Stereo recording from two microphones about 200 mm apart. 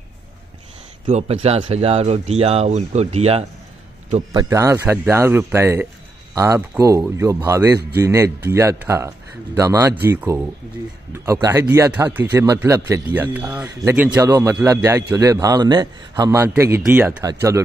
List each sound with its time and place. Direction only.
1.0 s speech: 30° right (ahead or behind)
4.3 s speech: 20° right (ahead or behind)